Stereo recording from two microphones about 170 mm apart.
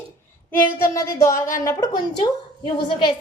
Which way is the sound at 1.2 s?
15° left (ahead or behind).